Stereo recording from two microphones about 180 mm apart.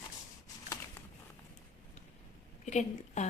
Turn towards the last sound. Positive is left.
turn(degrees=40)  # may be behind; listen again after turning